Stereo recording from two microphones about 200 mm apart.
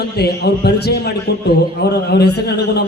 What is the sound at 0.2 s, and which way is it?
A man's voice, 55° left (ahead or behind).